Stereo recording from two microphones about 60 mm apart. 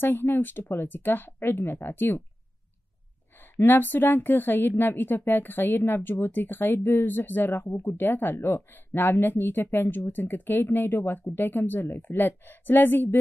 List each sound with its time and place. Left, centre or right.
0.0 s a woman's voice: left
3.3 s a woman's voice: left